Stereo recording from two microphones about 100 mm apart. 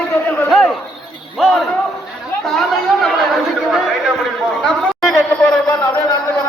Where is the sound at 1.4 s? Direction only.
Centre (ahead or behind).